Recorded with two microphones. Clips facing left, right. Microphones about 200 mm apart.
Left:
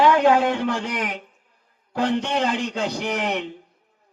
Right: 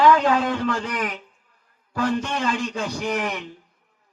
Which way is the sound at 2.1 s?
65° left (ahead or behind).